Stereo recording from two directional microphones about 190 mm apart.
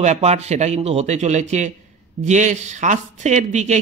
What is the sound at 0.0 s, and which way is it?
Speech, 35° right (ahead or behind).